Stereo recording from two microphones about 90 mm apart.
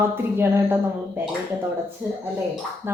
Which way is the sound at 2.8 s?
25° right (ahead or behind).